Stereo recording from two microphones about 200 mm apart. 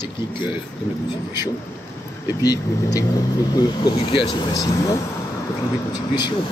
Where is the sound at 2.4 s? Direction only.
20° left (ahead or behind).